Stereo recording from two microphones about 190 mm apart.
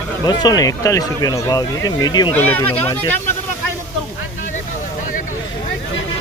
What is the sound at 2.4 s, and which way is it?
Speech, 10° left (ahead or behind).